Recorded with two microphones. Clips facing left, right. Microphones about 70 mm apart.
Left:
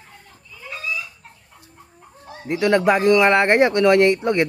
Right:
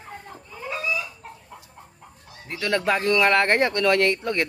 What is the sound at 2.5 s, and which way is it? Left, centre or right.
Speech, centre.